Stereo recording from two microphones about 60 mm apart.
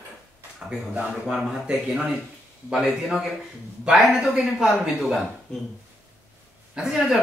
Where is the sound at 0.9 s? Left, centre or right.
Centre.